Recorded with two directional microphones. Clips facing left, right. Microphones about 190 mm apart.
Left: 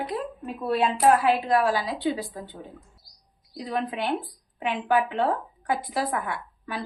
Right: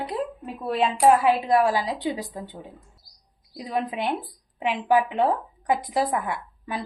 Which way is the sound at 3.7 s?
15° right (ahead or behind).